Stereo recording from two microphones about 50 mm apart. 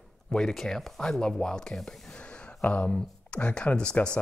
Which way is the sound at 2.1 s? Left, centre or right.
Left.